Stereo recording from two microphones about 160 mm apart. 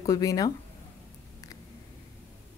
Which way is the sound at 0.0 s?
20° left (ahead or behind).